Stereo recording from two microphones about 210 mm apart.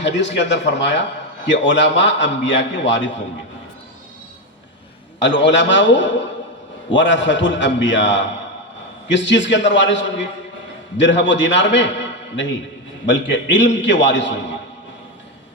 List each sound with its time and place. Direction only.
0.0 s a man's voice: 60° left (ahead or behind)
5.2 s a man's voice: 60° left (ahead or behind)